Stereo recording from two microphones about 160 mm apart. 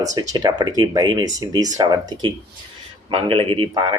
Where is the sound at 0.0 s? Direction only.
25° right (ahead or behind).